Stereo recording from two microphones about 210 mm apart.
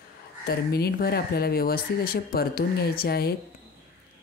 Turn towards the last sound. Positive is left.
turn(degrees=50)  # may be behind; listen again after turning